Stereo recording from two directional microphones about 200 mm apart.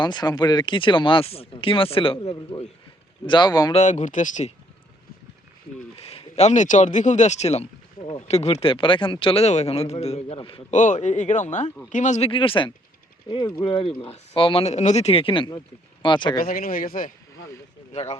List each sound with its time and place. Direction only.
0.0 s speech: 20° left (ahead or behind)
3.8 s speech: 35° left (ahead or behind)
6.0 s speech: 30° left (ahead or behind)
10.8 s speech: 40° left (ahead or behind)
16.4 s speech: 45° left (ahead or behind)
17.9 s speech: 30° left (ahead or behind)